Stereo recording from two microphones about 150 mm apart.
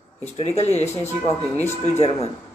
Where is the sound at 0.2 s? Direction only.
45° left (ahead or behind).